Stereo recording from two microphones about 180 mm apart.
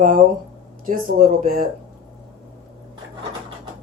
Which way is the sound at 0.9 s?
50° right (ahead or behind).